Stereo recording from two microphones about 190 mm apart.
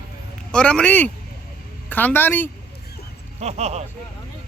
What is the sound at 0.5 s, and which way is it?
Speech, 5° left (ahead or behind).